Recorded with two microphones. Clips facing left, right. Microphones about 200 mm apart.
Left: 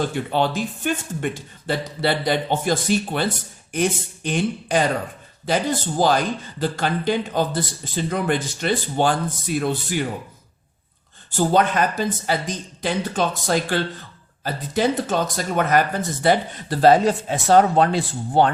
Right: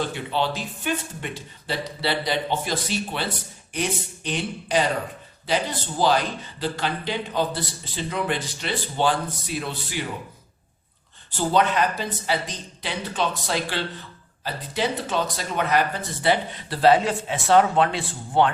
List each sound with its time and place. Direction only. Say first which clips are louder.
0.0 s speech: left 4 dB; 50° left (ahead or behind)
11.3 s speech: left 3 dB; 45° left (ahead or behind)